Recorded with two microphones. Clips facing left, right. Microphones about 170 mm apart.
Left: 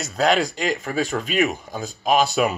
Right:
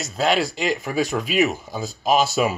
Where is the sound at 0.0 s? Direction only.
Centre (ahead or behind).